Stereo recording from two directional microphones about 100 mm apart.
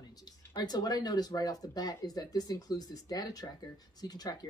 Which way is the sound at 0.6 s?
45° left (ahead or behind).